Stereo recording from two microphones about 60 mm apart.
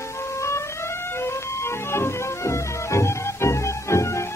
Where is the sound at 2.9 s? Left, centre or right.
Left.